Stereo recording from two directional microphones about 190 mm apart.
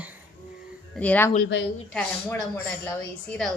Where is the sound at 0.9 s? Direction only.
10° left (ahead or behind).